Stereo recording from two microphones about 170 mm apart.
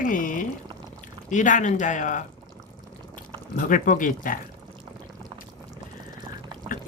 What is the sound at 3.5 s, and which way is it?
Speech, 50° left (ahead or behind).